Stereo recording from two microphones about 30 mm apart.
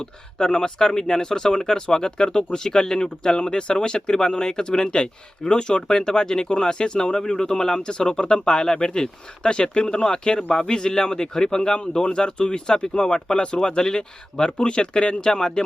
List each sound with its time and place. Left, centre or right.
0.0 s speech: left
13.3 s speech: left